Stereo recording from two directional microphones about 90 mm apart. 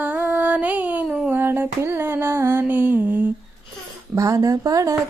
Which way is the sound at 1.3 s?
25° right (ahead or behind).